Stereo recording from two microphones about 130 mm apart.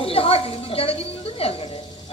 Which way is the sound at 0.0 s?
45° left (ahead or behind).